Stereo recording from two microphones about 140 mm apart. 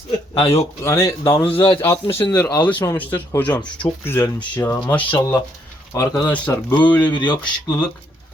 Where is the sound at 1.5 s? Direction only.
35° left (ahead or behind).